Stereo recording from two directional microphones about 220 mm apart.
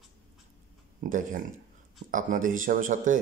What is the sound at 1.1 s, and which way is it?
Speech, 35° right (ahead or behind).